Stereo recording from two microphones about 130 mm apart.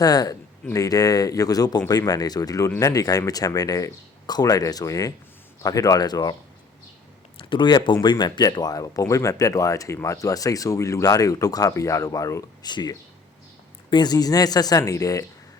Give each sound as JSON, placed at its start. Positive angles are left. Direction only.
{"t": 0.0, "sound": "speech", "side_deg": 30}
{"t": 7.3, "sound": "speech", "side_deg": 40}